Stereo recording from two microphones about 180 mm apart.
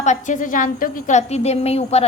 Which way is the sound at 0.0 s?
45° left (ahead or behind).